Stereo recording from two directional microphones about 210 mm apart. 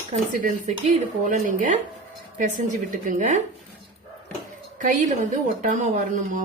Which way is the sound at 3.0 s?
35° right (ahead or behind).